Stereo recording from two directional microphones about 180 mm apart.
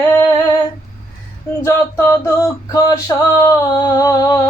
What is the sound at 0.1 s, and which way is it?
Female singing, 15° left (ahead or behind).